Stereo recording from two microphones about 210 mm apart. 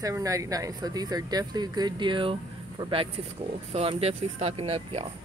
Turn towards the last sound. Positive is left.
turn(degrees=-25)  # may be behind; listen again after turning